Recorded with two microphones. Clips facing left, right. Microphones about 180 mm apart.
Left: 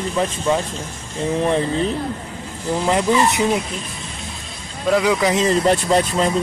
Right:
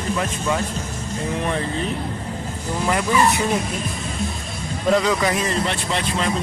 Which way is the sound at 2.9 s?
20° left (ahead or behind).